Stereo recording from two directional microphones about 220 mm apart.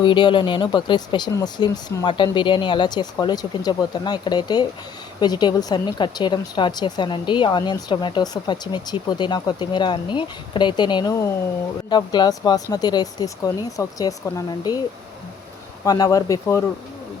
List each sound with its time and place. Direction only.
0.0 s a woman's voice: 20° left (ahead or behind)
15.8 s speech: 15° left (ahead or behind)